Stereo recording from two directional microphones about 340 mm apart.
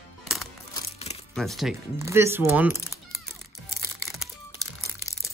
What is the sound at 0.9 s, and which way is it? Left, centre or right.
Coin, centre.